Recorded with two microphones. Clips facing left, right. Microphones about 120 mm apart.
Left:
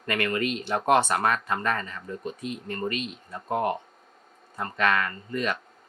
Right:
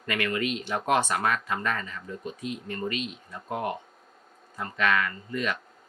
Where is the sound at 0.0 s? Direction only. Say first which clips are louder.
Left 2 dB; 40° left (ahead or behind).